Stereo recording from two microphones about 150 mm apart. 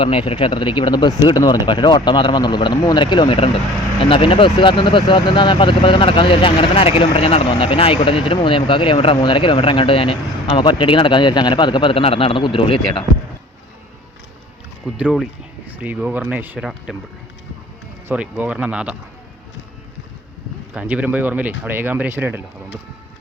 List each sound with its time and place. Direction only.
0.0 s speech: 40° left (ahead or behind)
14.9 s speech: 5° right (ahead or behind)
16.6 s speech: centre (ahead or behind)
18.1 s speech: 10° right (ahead or behind)
20.7 s speech: 10° right (ahead or behind)